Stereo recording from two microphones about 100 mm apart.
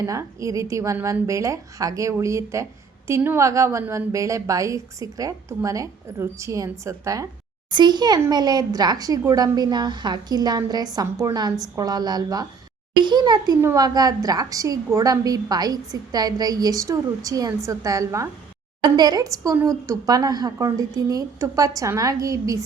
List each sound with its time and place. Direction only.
0.0 s a woman's voice: 30° right (ahead or behind)
7.7 s a woman's voice: 50° right (ahead or behind)
18.8 s a woman's voice: 45° right (ahead or behind)